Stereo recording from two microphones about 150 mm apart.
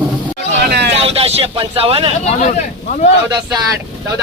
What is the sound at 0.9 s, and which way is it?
Speech, 40° right (ahead or behind).